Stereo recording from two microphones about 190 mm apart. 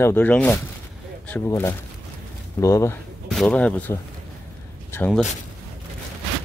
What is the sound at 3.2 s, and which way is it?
Speech, 5° left (ahead or behind).